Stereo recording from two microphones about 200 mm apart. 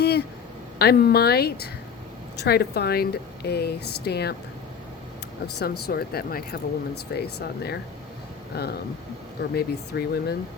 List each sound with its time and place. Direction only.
0.0 s a sound: 55° left (ahead or behind)
0.8 s speech: 50° left (ahead or behind)
5.5 s speech: 50° left (ahead or behind)